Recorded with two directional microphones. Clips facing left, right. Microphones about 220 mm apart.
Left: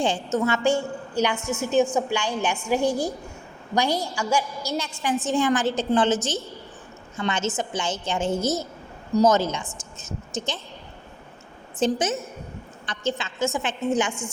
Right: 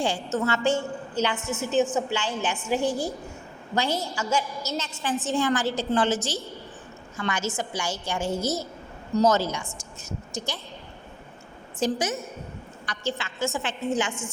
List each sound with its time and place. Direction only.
0.4 s a woman's voice: 15° left (ahead or behind)
7.2 s a woman's voice: 25° left (ahead or behind)
11.8 s a woman's voice: 25° left (ahead or behind)